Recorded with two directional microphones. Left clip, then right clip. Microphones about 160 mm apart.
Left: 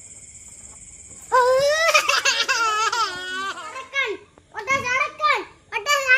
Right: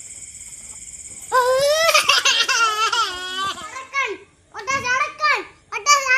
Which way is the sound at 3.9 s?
10° right (ahead or behind).